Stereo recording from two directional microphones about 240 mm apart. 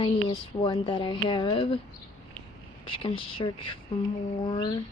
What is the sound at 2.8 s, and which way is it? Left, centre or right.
A woman's voice, left.